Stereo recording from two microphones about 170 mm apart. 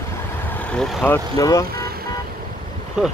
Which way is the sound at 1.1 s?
20° left (ahead or behind).